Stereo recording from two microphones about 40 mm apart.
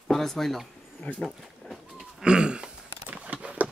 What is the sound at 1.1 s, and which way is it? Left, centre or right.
Speech, left.